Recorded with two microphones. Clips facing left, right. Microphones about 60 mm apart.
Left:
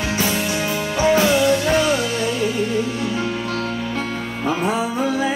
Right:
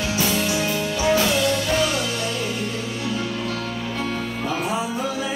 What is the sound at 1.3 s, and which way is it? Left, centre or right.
Music, centre.